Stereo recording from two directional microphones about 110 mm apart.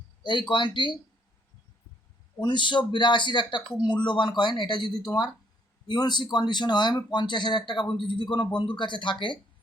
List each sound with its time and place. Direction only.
0.2 s speech: 45° left (ahead or behind)
2.4 s speech: 45° left (ahead or behind)